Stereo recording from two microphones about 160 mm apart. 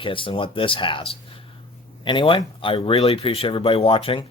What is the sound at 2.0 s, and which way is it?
Speech, 30° left (ahead or behind).